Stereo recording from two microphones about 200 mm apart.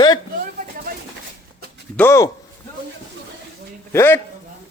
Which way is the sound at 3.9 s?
10° left (ahead or behind).